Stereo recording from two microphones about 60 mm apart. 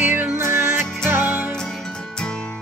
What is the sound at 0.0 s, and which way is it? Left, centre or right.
Music, right.